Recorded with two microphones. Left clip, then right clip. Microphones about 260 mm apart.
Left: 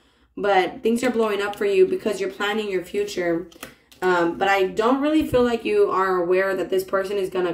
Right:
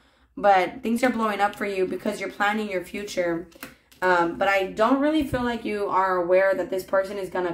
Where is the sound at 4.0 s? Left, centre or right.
Right.